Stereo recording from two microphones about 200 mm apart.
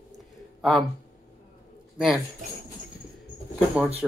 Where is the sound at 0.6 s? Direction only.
Centre (ahead or behind).